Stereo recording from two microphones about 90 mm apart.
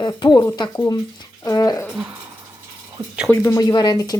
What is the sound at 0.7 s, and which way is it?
Speech, 40° left (ahead or behind).